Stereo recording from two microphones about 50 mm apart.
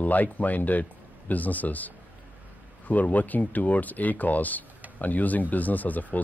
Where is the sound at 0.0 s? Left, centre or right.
Left.